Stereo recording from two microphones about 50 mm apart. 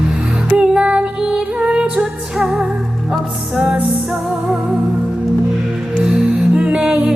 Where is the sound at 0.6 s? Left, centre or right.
Centre.